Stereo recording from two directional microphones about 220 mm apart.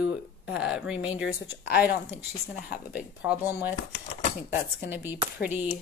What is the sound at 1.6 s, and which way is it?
Speech, 45° left (ahead or behind).